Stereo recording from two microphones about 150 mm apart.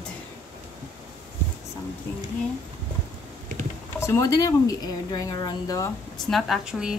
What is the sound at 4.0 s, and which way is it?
Speech, 20° left (ahead or behind).